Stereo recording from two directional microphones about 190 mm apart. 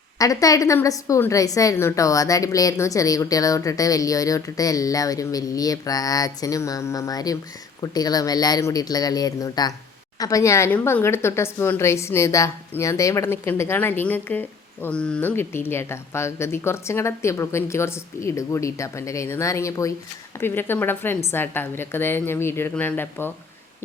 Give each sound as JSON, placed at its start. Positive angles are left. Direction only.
{"t": 0.2, "sound": "a woman's voice", "side_deg": 20}